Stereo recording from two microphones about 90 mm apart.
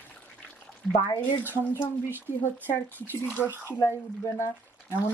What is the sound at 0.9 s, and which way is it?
Speech, 35° left (ahead or behind).